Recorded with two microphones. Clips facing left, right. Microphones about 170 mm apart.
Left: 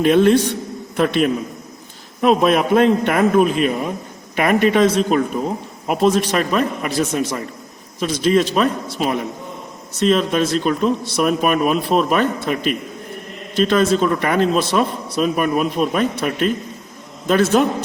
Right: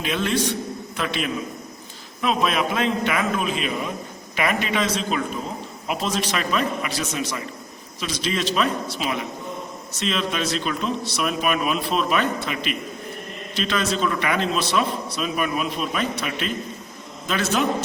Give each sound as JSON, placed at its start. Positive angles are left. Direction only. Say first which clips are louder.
{"t": 0.0, "sound": "a man's voice", "louder": "left 11 dB", "side_deg": 50}